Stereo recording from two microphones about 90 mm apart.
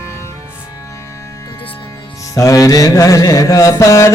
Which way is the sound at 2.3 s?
40° left (ahead or behind).